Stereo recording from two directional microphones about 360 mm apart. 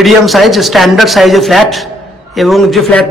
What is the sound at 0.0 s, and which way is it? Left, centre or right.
Speech, centre.